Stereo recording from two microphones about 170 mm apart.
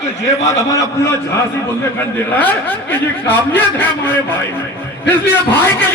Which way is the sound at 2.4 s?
10° left (ahead or behind).